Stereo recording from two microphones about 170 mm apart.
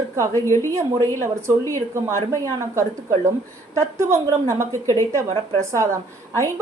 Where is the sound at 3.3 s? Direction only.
15° right (ahead or behind).